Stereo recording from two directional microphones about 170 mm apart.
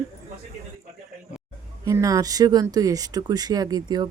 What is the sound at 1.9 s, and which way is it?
Speech, 20° right (ahead or behind).